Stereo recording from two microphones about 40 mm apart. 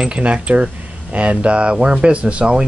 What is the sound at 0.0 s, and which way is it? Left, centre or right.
Speech, right.